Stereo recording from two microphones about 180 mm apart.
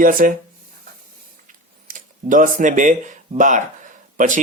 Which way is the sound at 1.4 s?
45° right (ahead or behind).